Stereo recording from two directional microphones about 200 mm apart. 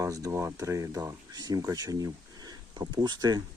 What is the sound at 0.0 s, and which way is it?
Speech, 15° right (ahead or behind).